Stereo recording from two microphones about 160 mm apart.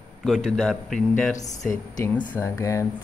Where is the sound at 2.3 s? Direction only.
15° left (ahead or behind).